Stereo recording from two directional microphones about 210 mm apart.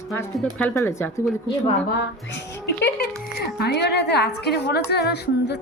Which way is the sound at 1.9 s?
55° left (ahead or behind).